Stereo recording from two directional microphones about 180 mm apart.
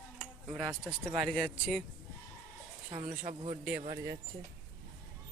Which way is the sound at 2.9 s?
40° right (ahead or behind).